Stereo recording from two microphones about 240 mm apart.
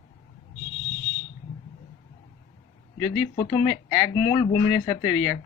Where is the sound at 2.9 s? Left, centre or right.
Centre.